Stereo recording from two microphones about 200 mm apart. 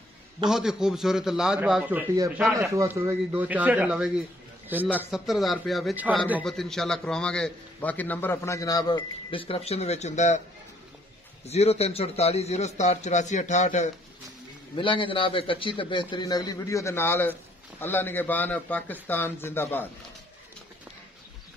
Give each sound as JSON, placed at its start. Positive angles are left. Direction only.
{"t": 0.5, "sound": "a man's voice", "side_deg": 0}
{"t": 11.4, "sound": "a man's voice", "side_deg": 30}
{"t": 14.8, "sound": "a man's voice", "side_deg": 25}